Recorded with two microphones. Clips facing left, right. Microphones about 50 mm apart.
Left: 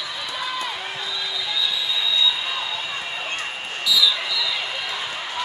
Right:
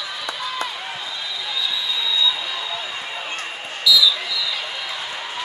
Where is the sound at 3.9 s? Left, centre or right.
Left.